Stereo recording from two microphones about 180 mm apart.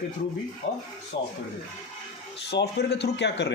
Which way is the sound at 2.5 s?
65° left (ahead or behind).